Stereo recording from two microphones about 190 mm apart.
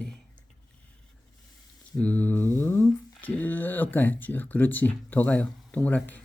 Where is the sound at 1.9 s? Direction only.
5° left (ahead or behind).